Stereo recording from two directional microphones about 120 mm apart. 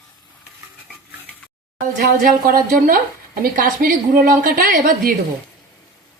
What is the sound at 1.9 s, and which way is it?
A woman's voice, 90° right.